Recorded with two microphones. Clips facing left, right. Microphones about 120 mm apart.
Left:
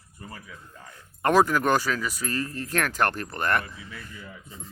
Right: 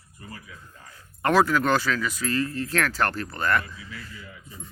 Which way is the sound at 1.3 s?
15° left (ahead or behind).